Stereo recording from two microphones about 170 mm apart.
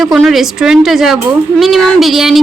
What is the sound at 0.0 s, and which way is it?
A woman's voice, centre (ahead or behind).